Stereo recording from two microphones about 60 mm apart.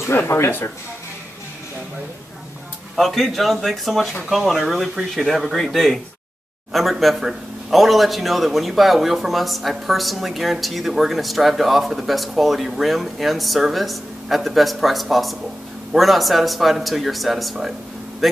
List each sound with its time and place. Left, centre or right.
0.3 s speech: left
3.0 s a man's voice: centre